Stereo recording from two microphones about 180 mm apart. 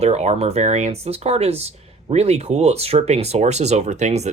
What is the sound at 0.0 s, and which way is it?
Speech, 35° right (ahead or behind).